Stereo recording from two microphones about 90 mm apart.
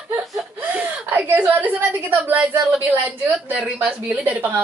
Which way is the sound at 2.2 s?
20° right (ahead or behind).